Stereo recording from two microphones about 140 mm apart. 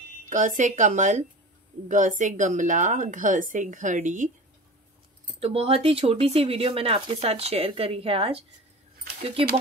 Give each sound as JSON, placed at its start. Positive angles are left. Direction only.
{"t": 0.2, "sound": "a woman's voice", "side_deg": -65}
{"t": 5.4, "sound": "speech", "side_deg": -45}